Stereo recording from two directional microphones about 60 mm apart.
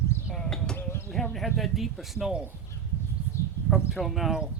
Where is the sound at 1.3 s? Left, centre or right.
Centre.